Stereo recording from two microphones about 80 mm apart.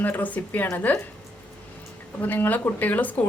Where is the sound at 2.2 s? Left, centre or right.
Left.